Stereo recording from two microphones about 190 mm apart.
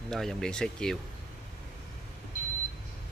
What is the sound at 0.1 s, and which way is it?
Speech, 5° left (ahead or behind).